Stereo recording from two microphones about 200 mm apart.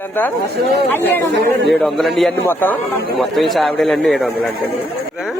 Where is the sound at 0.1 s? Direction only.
10° left (ahead or behind).